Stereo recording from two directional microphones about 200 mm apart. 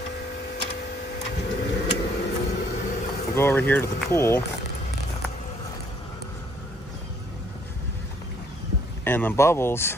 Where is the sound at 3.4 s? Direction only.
10° left (ahead or behind).